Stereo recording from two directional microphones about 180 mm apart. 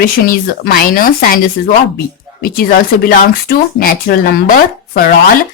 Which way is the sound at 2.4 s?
55° left (ahead or behind).